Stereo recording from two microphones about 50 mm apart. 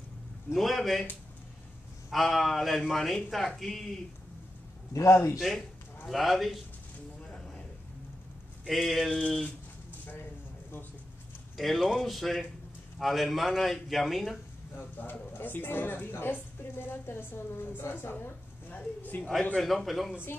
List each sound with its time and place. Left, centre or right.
0.5 s a man's voice: centre
2.0 s a man's voice: centre
4.9 s a man's voice: left
5.4 s a man's voice: centre
7.3 s a sound: centre
8.6 s a man's voice: centre
11.5 s a man's voice: centre
15.0 s a woman's voice: left
18.7 s speech: left
19.6 s a man's voice: centre